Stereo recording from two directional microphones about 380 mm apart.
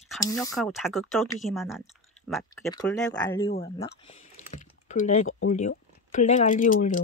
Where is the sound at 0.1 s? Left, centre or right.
Centre.